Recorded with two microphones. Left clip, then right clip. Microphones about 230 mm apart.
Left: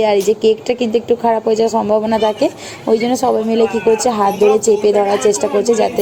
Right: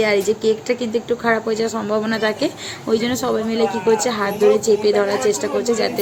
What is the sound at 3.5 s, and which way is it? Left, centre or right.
Speech, centre.